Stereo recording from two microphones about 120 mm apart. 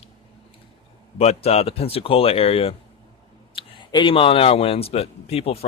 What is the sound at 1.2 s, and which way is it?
Speech, 60° left (ahead or behind).